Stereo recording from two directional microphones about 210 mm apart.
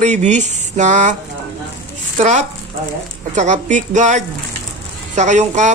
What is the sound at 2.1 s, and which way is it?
Speech, 35° right (ahead or behind).